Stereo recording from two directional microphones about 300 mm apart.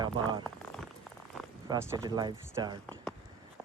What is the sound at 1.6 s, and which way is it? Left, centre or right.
Speech, centre.